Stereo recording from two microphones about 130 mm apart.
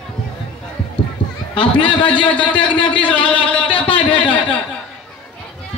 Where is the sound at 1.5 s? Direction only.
40° left (ahead or behind).